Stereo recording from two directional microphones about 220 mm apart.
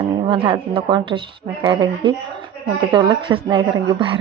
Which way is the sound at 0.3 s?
20° right (ahead or behind).